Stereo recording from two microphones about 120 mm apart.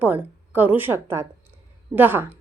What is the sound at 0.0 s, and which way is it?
A woman's voice, 15° right (ahead or behind).